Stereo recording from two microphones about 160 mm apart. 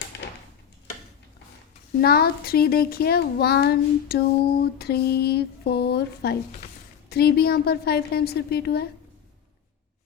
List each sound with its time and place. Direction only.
0.1 s a sound: 90° left
2.0 s a child's voice: 75° left (ahead or behind)
7.1 s a child's voice: 80° left